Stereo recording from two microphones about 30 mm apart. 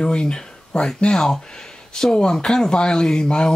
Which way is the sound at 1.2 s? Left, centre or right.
Centre.